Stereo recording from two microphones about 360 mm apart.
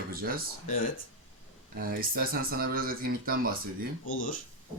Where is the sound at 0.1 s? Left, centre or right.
Right.